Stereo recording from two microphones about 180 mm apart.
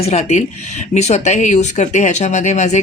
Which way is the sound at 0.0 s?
35° left (ahead or behind).